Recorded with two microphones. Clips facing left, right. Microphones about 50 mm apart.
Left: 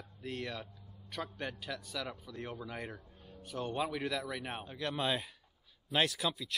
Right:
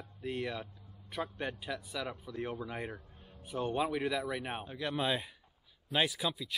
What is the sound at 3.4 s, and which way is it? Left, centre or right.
Speech, centre.